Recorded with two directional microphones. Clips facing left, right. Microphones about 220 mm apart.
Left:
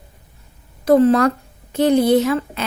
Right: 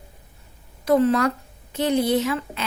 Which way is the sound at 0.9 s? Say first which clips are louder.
Left 5 dB; 40° left (ahead or behind).